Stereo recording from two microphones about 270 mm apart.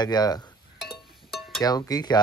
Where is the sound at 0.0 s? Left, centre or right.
Centre.